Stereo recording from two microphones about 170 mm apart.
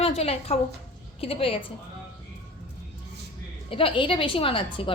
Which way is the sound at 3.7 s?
30° left (ahead or behind).